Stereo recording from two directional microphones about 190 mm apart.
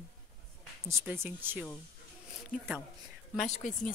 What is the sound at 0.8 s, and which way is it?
Speech, 15° right (ahead or behind).